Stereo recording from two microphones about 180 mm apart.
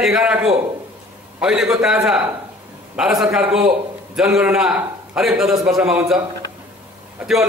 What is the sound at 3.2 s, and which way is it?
A man's voice, 5° right (ahead or behind).